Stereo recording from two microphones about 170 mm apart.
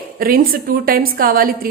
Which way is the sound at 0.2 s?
60° right (ahead or behind).